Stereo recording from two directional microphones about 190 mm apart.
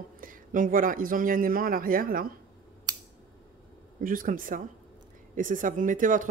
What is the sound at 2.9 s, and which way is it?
Scissors, 20° right (ahead or behind).